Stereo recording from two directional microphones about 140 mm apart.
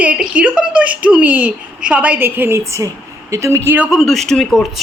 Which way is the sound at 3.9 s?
Centre (ahead or behind).